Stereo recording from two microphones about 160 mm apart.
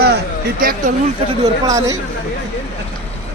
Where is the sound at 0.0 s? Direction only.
90° right; by 0.9 s 65° right (ahead or behind).